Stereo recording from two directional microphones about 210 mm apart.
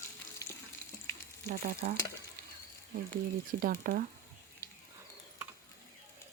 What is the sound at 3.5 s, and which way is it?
Speech, 40° right (ahead or behind).